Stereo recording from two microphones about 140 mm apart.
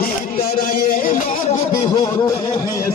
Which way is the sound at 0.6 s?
80° left.